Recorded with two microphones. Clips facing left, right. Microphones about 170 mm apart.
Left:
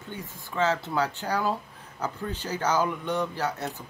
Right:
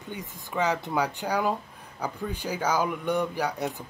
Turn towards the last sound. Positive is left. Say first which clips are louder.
# right 2 dB
turn(degrees=-15)  # may be behind; listen again after turning